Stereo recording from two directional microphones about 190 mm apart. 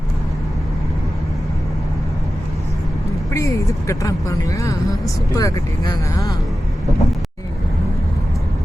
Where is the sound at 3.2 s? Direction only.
15° left (ahead or behind).